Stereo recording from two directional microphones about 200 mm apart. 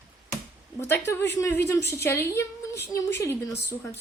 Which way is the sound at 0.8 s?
10° left (ahead or behind).